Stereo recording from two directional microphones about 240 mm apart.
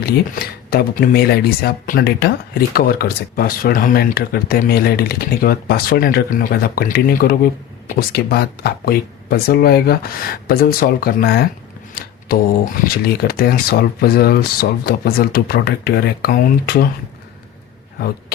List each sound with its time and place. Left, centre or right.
0.0 s speech: left